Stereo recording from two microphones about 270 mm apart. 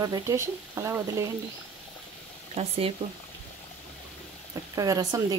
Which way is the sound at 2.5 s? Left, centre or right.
Right.